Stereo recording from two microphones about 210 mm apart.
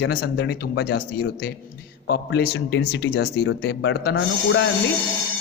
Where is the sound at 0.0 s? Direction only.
50° left (ahead or behind).